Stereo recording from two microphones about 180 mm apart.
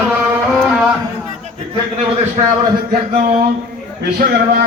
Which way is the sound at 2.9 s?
50° right (ahead or behind).